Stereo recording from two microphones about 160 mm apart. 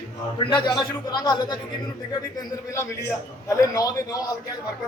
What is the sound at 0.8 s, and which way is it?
A man's voice, 25° left (ahead or behind).